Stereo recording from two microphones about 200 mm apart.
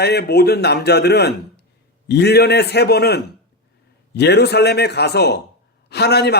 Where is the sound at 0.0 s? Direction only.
55° left (ahead or behind).